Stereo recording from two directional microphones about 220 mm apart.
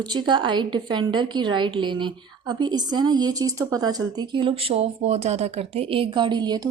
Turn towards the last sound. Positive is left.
turn(degrees=-20)  # may be behind; listen again after turning